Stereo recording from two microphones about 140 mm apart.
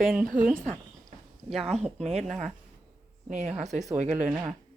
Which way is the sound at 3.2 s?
60° right (ahead or behind).